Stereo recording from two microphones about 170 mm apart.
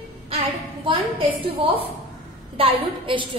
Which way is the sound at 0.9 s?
30° right (ahead or behind).